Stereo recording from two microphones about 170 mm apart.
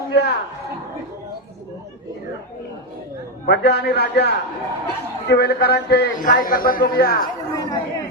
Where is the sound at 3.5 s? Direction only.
75° left (ahead or behind).